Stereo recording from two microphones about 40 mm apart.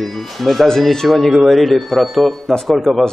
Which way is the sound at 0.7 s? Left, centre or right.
Centre.